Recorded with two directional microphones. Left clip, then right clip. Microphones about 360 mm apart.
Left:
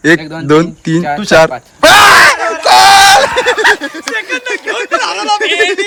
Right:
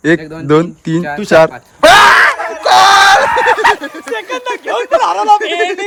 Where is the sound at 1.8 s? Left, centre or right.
Centre.